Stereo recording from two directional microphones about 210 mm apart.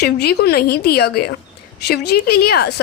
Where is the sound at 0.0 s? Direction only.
50° left (ahead or behind).